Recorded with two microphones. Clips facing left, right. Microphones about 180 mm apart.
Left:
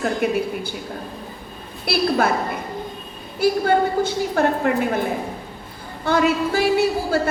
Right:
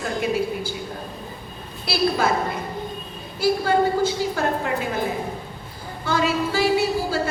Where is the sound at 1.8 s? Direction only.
60° left (ahead or behind).